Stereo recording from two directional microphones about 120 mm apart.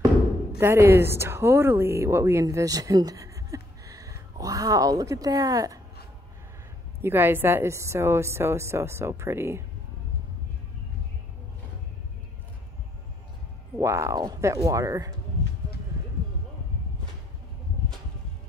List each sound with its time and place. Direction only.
0.6 s speech: 20° right (ahead or behind)
7.0 s a woman's voice: 20° right (ahead or behind)
13.7 s a woman's voice: 25° right (ahead or behind)